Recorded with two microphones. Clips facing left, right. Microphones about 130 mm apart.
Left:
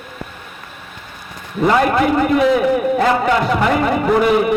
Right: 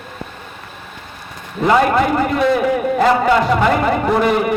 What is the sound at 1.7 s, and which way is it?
A man's voice, centre (ahead or behind).